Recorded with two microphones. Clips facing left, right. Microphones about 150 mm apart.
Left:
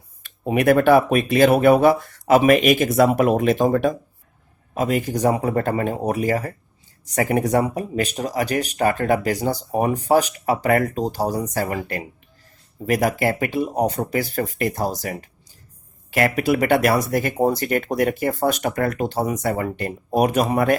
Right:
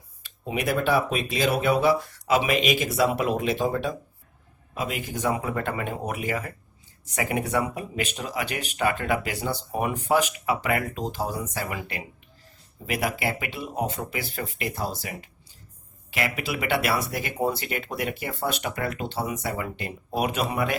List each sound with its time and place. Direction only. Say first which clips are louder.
0.2 s speech: left 9 dB; 50° left (ahead or behind)